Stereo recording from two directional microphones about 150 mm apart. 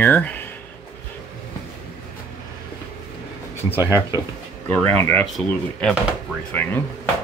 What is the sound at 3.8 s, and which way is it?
Speech, 25° left (ahead or behind).